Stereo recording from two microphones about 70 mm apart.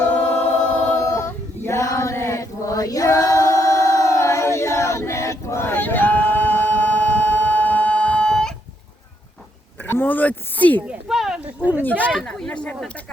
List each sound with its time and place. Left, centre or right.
0.2 s choir: left
0.9 s male singing: left; by 8.5 s centre
9.8 s speech: left
11.1 s a sound: centre
12.0 s speech: centre